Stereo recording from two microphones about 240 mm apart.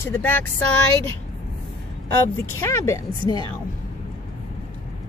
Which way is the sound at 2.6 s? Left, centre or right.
Centre.